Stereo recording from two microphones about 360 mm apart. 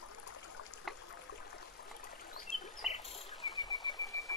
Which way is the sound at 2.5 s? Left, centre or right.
Left.